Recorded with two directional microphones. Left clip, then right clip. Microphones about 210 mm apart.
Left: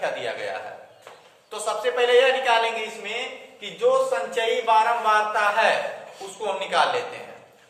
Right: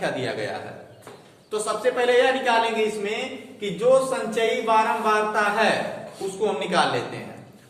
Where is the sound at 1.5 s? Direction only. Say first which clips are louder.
Right 2 dB; 25° left (ahead or behind).